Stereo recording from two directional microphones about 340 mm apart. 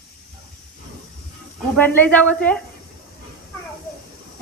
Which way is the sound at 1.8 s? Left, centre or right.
Centre.